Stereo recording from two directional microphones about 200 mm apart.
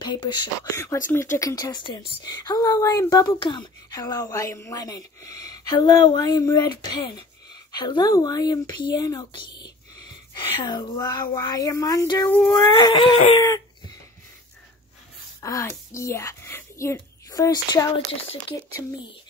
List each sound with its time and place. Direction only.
0.0 s a woman's voice: 20° left (ahead or behind)
15.4 s a child's voice: 15° left (ahead or behind)
18.5 s speech: 55° left (ahead or behind)